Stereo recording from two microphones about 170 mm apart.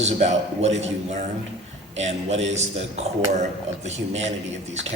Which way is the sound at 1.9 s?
40° right (ahead or behind).